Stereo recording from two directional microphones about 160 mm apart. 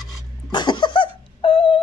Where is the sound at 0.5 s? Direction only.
30° left (ahead or behind).